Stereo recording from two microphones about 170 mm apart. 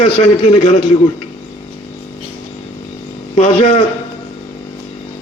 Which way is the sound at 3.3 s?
45° left (ahead or behind).